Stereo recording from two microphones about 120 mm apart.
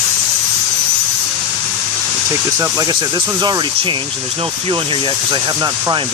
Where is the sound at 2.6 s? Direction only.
30° right (ahead or behind).